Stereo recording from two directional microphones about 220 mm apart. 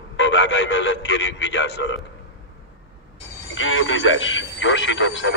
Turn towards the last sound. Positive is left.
turn(degrees=55)  # may be behind; listen again after turning